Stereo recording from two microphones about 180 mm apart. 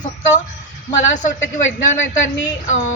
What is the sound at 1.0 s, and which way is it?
Speech, 45° left (ahead or behind).